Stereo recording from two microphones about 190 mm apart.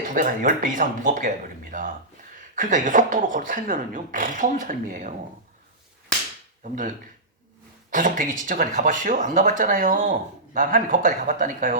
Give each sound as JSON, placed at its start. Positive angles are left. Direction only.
{"t": 0.1, "sound": "speech", "side_deg": -45}
{"t": 6.6, "sound": "speech", "side_deg": -45}